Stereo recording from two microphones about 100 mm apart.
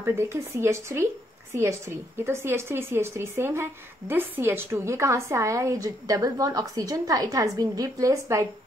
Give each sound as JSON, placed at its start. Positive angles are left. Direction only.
{"t": 0.0, "sound": "a woman's voice", "side_deg": -25}